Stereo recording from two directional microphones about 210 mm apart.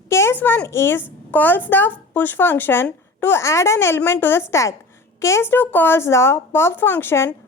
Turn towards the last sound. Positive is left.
turn(degrees=10)  # may be behind; listen again after turning